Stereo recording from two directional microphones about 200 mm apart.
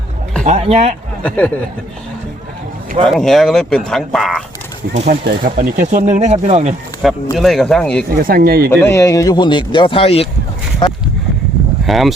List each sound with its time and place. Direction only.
0.4 s speech: 35° right (ahead or behind)
1.2 s speech: 5° left (ahead or behind)
3.0 s speech: centre (ahead or behind)
5.2 s speech: 45° right (ahead or behind)
7.0 s speech: centre (ahead or behind)
8.2 s speech: 45° right (ahead or behind)
8.7 s speech: 10° left (ahead or behind)
11.9 s speech: centre (ahead or behind)